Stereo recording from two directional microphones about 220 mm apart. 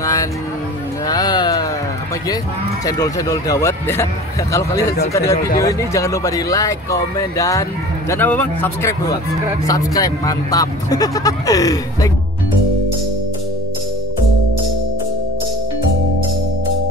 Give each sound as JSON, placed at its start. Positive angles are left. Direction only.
{"t": 0.0, "sound": "music", "side_deg": 15}
{"t": 1.0, "sound": "a sound", "side_deg": 20}
{"t": 2.8, "sound": "speech", "side_deg": 15}